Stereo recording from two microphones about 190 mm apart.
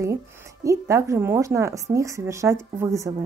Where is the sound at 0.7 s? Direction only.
15° right (ahead or behind).